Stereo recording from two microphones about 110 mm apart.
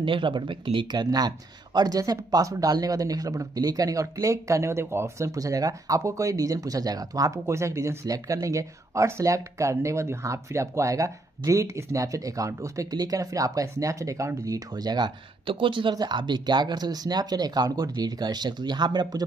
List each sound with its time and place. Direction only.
0.0 s speech: 50° right (ahead or behind)